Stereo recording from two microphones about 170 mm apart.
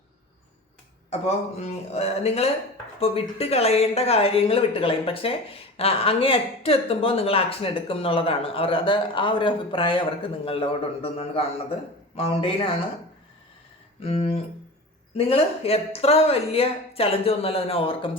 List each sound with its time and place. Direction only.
1.5 s speech: 40° left (ahead or behind)
14.0 s speech: 35° left (ahead or behind)